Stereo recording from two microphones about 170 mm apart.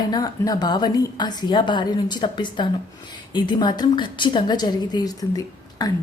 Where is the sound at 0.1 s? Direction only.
25° left (ahead or behind).